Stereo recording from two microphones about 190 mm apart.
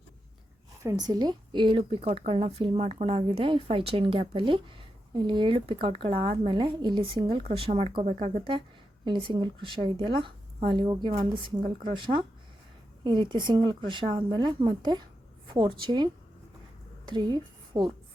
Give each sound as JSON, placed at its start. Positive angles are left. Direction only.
{"t": 0.8, "sound": "a woman's voice", "side_deg": -20}
{"t": 17.1, "sound": "a woman's voice", "side_deg": -20}